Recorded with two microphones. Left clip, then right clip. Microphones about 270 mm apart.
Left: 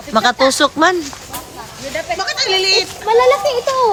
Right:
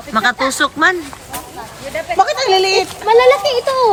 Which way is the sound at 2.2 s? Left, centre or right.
Centre.